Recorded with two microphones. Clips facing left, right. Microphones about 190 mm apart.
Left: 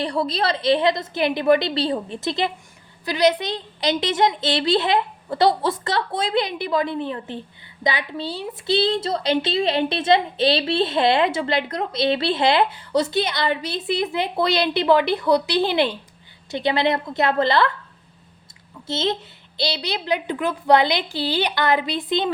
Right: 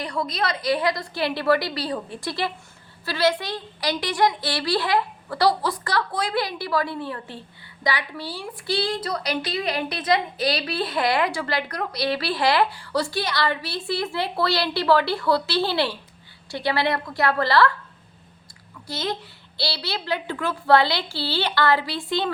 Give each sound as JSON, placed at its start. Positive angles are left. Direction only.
{"t": 0.0, "sound": "a woman's voice", "side_deg": 30}
{"t": 18.9, "sound": "a woman's voice", "side_deg": 25}